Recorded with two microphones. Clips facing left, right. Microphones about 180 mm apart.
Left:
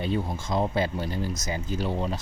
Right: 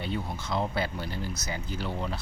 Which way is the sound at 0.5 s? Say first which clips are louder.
Left 4 dB; 20° left (ahead or behind).